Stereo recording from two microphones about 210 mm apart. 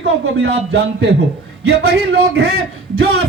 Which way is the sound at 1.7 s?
50° right (ahead or behind).